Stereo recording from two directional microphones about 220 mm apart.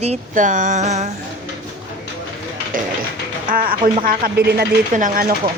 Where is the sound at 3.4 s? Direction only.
40° right (ahead or behind).